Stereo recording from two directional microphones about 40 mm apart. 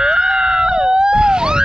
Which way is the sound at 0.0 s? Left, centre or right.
Right.